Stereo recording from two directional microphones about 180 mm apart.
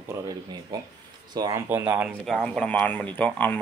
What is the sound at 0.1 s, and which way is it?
Speech, 20° right (ahead or behind).